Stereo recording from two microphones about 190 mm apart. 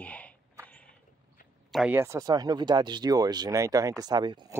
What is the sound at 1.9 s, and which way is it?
Speech, 15° right (ahead or behind).